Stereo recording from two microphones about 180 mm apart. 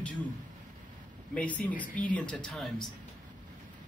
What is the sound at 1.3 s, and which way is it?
Speech, 5° left (ahead or behind).